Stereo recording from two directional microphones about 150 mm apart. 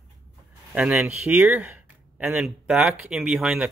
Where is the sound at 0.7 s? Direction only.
10° right (ahead or behind).